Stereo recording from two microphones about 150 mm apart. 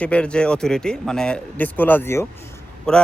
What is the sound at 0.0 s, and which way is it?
Speech, 5° left (ahead or behind).